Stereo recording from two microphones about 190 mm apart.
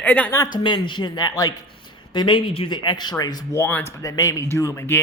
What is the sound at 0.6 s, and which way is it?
Speech, 25° left (ahead or behind).